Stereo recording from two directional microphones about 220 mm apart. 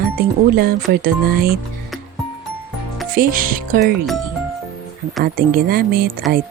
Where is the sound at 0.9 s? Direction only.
40° right (ahead or behind).